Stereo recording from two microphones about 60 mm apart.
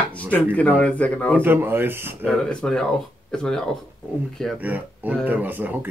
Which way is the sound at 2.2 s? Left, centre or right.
Centre.